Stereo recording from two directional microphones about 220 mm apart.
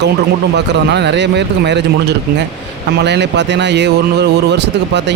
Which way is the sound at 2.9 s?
50° right (ahead or behind).